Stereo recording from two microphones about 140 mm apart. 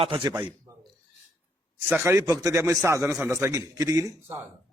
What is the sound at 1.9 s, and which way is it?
A man's voice, 15° right (ahead or behind).